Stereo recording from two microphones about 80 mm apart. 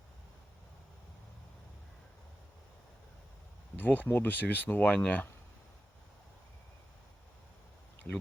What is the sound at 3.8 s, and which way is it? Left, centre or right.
Speech, left.